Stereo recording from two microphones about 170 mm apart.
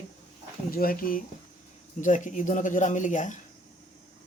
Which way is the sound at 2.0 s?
45° left (ahead or behind).